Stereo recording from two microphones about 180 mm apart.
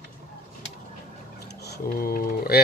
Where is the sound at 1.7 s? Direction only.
55° left (ahead or behind).